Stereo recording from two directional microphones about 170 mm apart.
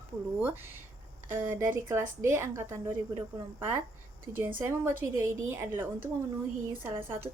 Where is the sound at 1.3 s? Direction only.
10° right (ahead or behind).